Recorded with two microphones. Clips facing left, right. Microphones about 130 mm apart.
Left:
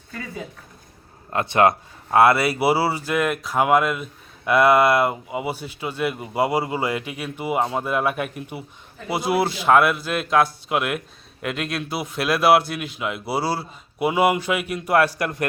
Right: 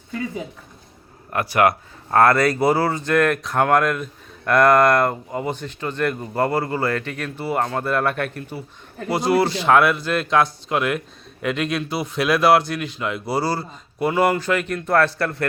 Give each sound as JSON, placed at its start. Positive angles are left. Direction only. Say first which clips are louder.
{"t": 1.3, "sound": "speech", "louder": "even", "side_deg": 25}
{"t": 2.0, "sound": "speech", "louder": "even", "side_deg": 10}